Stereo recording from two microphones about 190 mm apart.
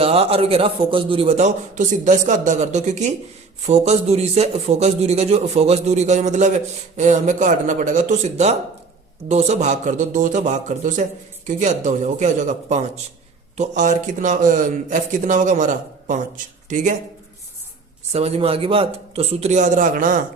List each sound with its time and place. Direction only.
0.0 s a man's voice: 30° right (ahead or behind)
18.1 s a man's voice: 30° right (ahead or behind)